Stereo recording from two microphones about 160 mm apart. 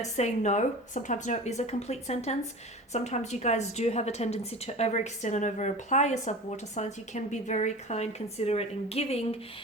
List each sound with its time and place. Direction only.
0.0 s a woman's voice: 45° left (ahead or behind)